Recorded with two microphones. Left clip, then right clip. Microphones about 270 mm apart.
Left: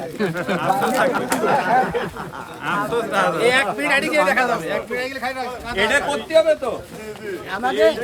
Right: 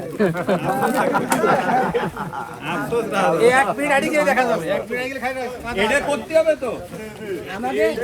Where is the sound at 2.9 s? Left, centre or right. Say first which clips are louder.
Right 1 dB; centre.